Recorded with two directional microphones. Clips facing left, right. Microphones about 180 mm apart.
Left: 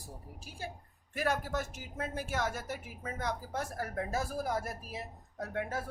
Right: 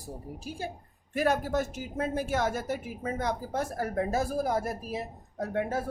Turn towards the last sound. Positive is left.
turn(degrees=-30)  # may be behind; listen again after turning